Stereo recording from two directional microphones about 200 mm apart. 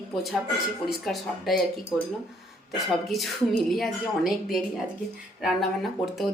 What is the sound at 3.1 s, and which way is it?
A woman's voice, centre (ahead or behind).